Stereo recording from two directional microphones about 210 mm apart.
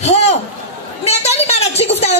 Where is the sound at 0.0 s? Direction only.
30° left (ahead or behind).